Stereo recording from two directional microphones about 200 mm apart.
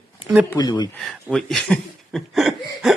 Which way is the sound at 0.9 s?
5° left (ahead or behind).